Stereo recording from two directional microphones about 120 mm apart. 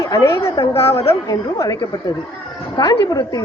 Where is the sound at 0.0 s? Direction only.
30° left (ahead or behind).